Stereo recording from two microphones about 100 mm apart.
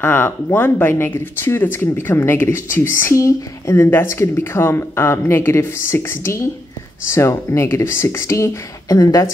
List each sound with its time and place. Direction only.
0.0 s speech: 20° left (ahead or behind)